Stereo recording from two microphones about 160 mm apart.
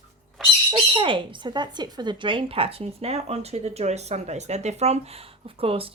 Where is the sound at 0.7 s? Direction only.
30° right (ahead or behind).